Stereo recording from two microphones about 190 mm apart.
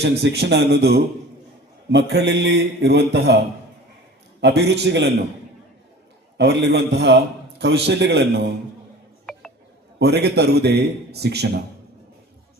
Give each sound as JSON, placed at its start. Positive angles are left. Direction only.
{"t": 0.0, "sound": "a man's voice", "side_deg": -65}
{"t": 4.4, "sound": "a man's voice", "side_deg": -65}
{"t": 6.3, "sound": "a man's voice", "side_deg": -65}
{"t": 10.0, "sound": "a man's voice", "side_deg": -60}